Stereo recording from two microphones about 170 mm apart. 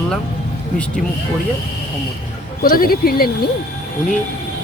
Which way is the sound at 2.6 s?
60° left (ahead or behind).